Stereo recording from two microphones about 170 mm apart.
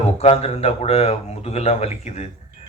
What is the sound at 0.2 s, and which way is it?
Speech, 35° left (ahead or behind).